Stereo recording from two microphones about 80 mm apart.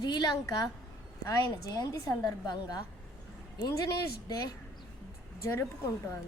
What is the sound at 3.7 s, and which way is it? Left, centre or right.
Speech, left.